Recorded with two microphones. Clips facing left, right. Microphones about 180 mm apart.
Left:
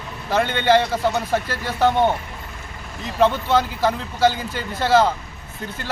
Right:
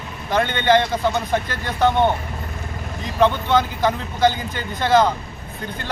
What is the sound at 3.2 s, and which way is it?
Speech, centre (ahead or behind).